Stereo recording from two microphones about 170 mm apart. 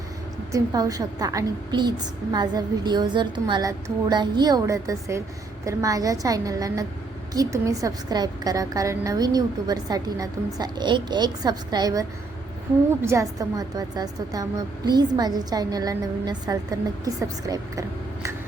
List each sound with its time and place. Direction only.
0.5 s a woman's voice: 20° right (ahead or behind)